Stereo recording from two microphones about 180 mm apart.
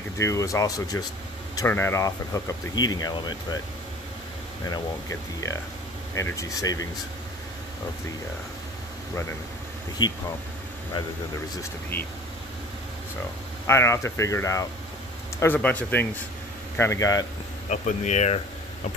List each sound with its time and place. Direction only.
0.2 s speech: 15° left (ahead or behind)
6.1 s speech: 15° left (ahead or behind)
10.0 s speech: 25° left (ahead or behind)
13.7 s speech: 15° left (ahead or behind)
17.6 s speech: 40° left (ahead or behind)